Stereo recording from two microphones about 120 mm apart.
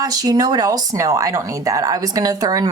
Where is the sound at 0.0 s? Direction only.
30° right (ahead or behind).